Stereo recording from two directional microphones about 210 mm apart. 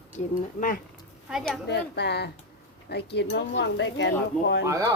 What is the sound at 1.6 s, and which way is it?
Speech, 55° left (ahead or behind).